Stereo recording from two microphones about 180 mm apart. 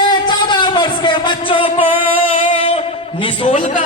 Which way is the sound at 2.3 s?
30° left (ahead or behind).